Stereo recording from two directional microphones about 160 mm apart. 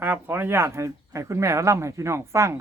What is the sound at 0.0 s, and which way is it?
Speech, 15° right (ahead or behind).